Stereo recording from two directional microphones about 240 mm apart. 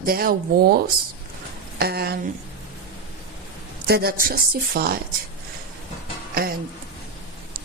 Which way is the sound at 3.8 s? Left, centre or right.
Right.